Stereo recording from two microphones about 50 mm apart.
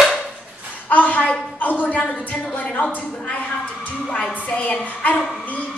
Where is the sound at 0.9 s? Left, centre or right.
Left.